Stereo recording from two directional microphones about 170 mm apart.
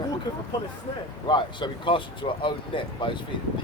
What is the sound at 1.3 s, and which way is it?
Speech, 25° left (ahead or behind).